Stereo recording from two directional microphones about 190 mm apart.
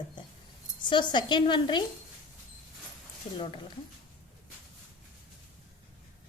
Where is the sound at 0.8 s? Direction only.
25° left (ahead or behind).